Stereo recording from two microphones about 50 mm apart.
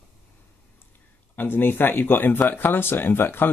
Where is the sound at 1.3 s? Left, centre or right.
Left.